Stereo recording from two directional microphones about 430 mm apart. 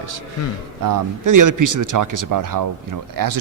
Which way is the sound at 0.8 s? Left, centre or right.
Right.